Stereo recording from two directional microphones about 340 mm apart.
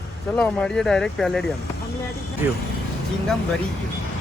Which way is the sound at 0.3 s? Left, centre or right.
Centre.